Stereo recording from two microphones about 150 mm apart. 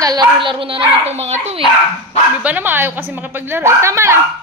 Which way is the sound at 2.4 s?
10° right (ahead or behind).